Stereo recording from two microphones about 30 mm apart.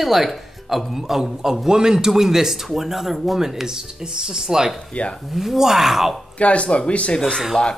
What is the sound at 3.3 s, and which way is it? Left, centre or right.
A man's voice, centre.